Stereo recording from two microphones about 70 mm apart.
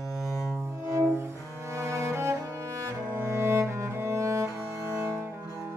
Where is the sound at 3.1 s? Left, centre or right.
Right.